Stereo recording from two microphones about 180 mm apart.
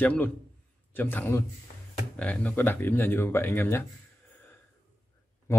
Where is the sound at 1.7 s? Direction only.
50° left (ahead or behind).